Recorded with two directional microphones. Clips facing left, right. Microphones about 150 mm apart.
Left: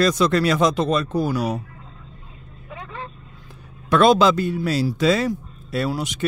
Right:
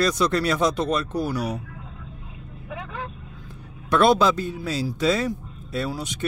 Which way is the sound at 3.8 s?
90° left.